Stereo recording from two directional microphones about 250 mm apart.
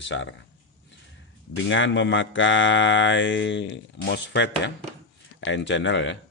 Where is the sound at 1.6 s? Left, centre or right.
Left.